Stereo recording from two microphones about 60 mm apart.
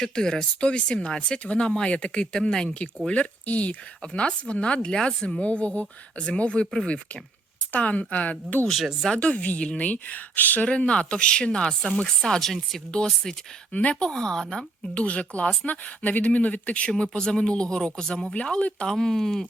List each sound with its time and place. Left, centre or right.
0.0 s speech: centre
7.7 s speech: left
8.6 s speech: centre
9.0 s speech: centre